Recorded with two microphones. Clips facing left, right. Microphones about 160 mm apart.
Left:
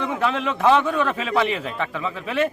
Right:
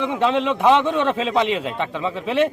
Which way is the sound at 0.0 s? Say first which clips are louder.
Right 4 dB; 20° right (ahead or behind).